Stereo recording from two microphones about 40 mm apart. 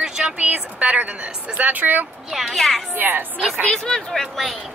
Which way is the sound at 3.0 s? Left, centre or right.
Right.